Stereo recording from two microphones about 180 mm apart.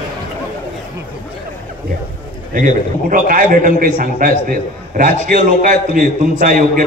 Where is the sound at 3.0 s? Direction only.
50° right (ahead or behind).